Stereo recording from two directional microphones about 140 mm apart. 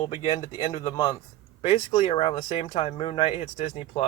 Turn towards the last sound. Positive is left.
turn(degrees=45)  # may be behind; listen again after turning